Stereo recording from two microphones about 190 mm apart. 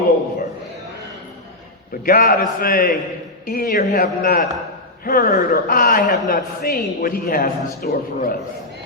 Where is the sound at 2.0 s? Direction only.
50° left (ahead or behind).